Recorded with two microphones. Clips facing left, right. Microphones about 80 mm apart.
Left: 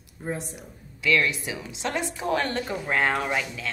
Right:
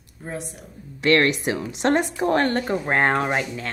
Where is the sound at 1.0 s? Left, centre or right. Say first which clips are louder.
Right 5 dB; right.